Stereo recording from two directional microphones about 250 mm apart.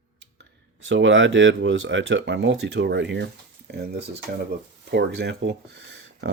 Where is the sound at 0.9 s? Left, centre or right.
Right.